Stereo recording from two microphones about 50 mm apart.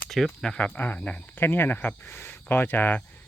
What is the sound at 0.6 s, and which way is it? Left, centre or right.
Speech, left.